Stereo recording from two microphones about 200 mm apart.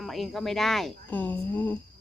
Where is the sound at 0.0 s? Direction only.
Centre (ahead or behind).